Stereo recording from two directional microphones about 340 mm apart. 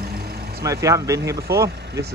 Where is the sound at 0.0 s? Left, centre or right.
Right.